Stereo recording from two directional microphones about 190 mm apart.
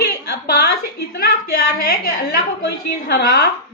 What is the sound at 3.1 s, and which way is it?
Speech, 60° left (ahead or behind).